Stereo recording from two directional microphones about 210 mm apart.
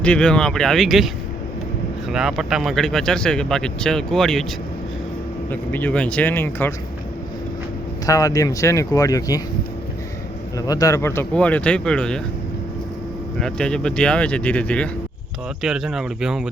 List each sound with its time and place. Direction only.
0.0 s speech: 5° left (ahead or behind)
5.5 s speech: 10° left (ahead or behind)
8.0 s speech: 15° left (ahead or behind)
10.7 s speech: 15° left (ahead or behind)
13.4 s speech: 5° left (ahead or behind)